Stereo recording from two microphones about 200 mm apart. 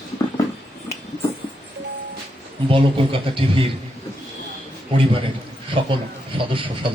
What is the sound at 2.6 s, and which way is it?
Speech, 25° right (ahead or behind).